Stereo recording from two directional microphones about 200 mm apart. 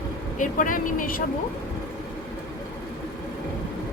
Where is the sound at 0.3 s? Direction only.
40° left (ahead or behind).